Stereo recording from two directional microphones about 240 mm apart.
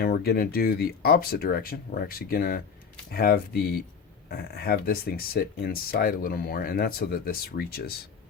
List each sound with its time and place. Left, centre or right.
0.0 s speech: left